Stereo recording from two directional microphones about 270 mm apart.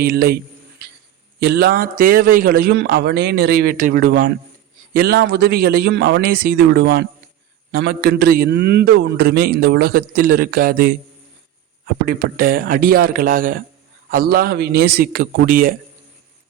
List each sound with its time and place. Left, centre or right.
0.0 s a man's voice: right
1.4 s a man's voice: right
12.0 s a man's voice: right